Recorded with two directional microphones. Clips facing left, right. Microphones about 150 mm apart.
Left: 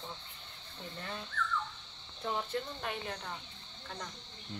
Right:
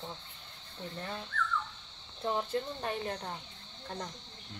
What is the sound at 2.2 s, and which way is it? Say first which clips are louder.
Speech: right 3 dB; 30° right (ahead or behind).